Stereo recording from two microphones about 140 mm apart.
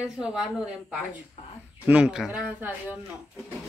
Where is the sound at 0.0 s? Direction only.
5° right (ahead or behind).